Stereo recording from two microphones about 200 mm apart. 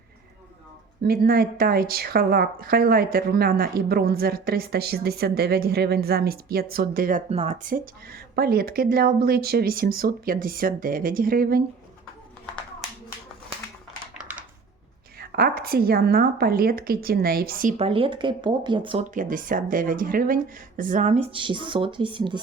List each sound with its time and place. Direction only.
1.0 s a woman's voice: 50° right (ahead or behind)
7.3 s a woman's voice: 35° right (ahead or behind)
14.1 s a sound: 5° right (ahead or behind)
15.2 s a woman's voice: 50° right (ahead or behind)
17.7 s speech: 25° right (ahead or behind)
19.1 s speech: 40° right (ahead or behind); by 22.4 s 25° right (ahead or behind)